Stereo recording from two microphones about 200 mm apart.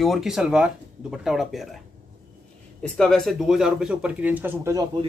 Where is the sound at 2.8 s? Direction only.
5° left (ahead or behind).